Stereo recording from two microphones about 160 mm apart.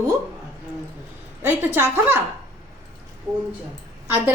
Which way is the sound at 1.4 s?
10° right (ahead or behind).